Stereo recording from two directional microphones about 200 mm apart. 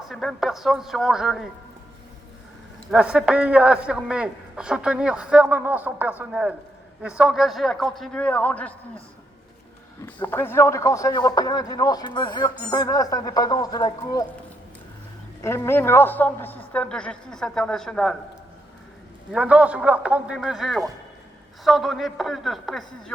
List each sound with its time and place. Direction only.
0.1 s a man's voice: centre (ahead or behind)
2.9 s a man's voice: 5° right (ahead or behind)
10.0 s a man's voice: 10° left (ahead or behind)
15.4 s a man's voice: 10° left (ahead or behind)
19.3 s a man's voice: 5° right (ahead or behind)